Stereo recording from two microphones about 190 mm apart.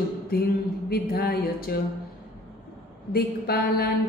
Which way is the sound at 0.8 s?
55° left (ahead or behind).